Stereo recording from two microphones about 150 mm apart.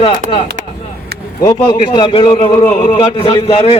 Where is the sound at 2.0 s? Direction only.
35° left (ahead or behind).